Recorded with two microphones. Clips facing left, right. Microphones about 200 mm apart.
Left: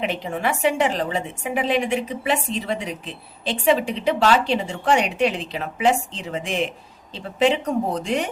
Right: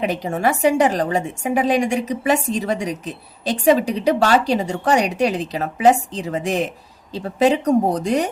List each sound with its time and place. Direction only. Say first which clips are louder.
0.0 s a woman's voice: right 4 dB; 40° right (ahead or behind)